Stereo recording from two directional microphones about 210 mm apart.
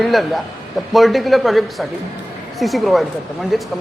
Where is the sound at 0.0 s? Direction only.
Centre (ahead or behind).